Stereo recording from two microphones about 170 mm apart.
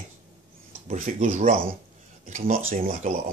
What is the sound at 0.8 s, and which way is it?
Speech, 50° right (ahead or behind).